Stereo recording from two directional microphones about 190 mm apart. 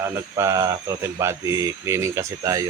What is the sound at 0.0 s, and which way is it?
Speech, 15° right (ahead or behind).